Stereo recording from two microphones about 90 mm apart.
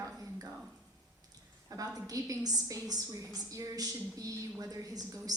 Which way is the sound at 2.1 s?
45° right (ahead or behind).